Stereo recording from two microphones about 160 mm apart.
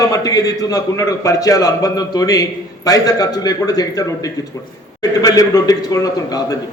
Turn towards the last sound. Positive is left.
turn(degrees=25)  # may be behind; listen again after turning